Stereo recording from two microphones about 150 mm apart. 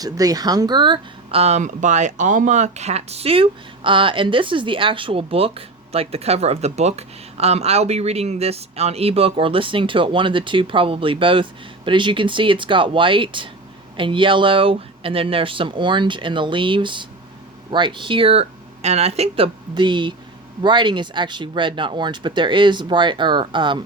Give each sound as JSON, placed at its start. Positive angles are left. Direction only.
{"t": 0.0, "sound": "speech", "side_deg": -25}
{"t": 19.7, "sound": "speech", "side_deg": -30}